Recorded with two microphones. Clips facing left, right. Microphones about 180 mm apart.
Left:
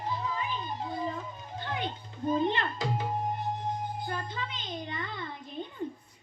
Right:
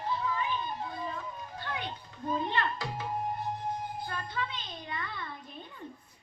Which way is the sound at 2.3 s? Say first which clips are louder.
Left 3 dB; 20° left (ahead or behind).